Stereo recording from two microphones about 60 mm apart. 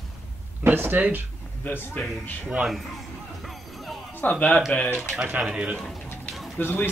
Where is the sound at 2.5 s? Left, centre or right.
Centre.